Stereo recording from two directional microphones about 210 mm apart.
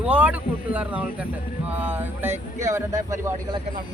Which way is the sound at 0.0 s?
5° right (ahead or behind).